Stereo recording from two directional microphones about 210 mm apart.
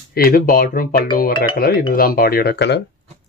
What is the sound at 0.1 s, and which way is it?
Speech, 45° left (ahead or behind).